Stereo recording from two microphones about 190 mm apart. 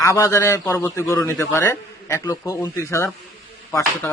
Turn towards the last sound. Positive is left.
turn(degrees=10)  # may be behind; listen again after turning